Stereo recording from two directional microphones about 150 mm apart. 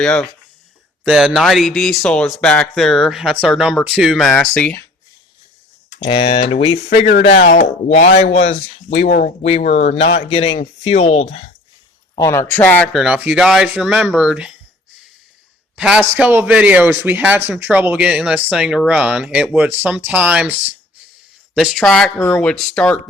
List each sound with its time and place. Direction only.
0.0 s speech: 5° left (ahead or behind)
6.1 s speech: 40° left (ahead or behind)
12.1 s speech: 20° left (ahead or behind); by 14.5 s 5° right (ahead or behind)
15.7 s a man's voice: 5° right (ahead or behind)